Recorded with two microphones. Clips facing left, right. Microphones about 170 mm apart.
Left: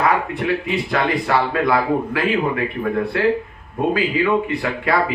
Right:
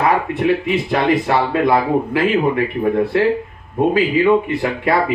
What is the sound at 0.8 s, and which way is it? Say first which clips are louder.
Speech: right 5 dB; 20° right (ahead or behind).